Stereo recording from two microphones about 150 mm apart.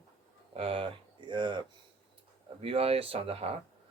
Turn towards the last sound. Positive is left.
turn(degrees=-40)  # may be behind; listen again after turning